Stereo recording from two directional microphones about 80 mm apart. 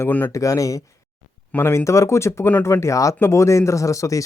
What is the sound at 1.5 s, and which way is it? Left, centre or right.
Speech, left.